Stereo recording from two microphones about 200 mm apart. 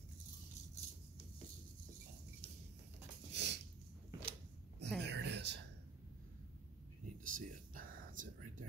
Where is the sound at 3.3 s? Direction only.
60° right (ahead or behind).